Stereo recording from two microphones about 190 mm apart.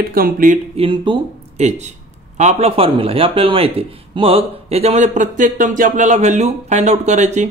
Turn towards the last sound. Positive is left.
turn(degrees=-40)  # may be behind; listen again after turning